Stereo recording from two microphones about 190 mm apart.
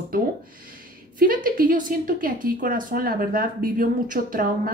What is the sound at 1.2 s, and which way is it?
Speech, 50° right (ahead or behind).